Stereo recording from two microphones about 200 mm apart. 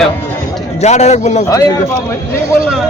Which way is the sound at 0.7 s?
35° left (ahead or behind).